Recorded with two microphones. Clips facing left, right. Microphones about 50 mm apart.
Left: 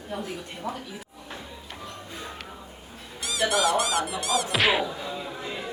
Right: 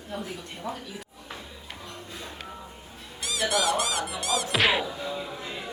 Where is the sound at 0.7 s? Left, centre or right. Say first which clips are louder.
Left 1 dB; left.